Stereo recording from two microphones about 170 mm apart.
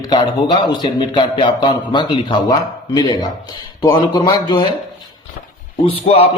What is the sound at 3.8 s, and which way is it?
Speech, 25° left (ahead or behind).